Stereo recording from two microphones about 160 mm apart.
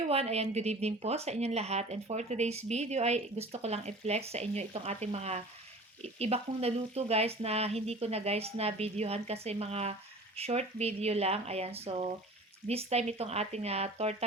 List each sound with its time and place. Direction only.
0.1 s a woman's voice: 40° right (ahead or behind)